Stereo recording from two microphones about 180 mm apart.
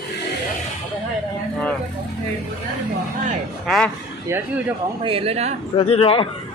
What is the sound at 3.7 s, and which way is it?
Speech, 5° left (ahead or behind).